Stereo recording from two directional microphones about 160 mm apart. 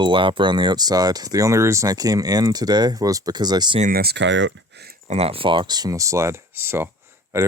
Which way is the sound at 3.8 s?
70° right (ahead or behind).